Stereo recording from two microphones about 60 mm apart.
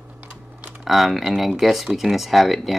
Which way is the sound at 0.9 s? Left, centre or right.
Centre.